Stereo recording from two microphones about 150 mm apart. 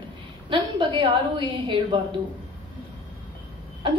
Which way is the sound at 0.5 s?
30° right (ahead or behind).